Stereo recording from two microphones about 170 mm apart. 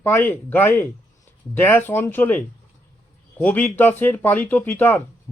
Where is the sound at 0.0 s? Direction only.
10° left (ahead or behind).